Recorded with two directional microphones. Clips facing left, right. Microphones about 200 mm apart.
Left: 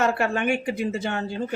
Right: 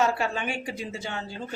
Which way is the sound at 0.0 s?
60° left (ahead or behind).